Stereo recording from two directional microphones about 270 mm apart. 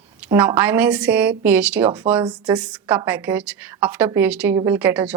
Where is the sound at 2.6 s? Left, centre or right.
Centre.